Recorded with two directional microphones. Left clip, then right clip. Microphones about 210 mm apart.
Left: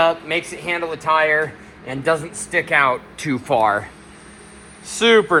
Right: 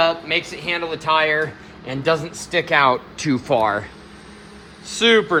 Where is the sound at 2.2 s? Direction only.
15° right (ahead or behind).